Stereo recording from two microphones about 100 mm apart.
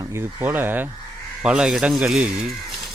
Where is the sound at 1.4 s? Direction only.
10° right (ahead or behind).